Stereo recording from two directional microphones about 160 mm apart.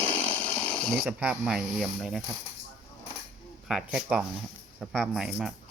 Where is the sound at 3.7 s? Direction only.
5° right (ahead or behind).